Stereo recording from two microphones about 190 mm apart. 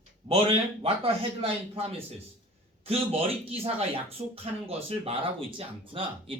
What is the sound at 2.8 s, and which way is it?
Speech, 30° right (ahead or behind).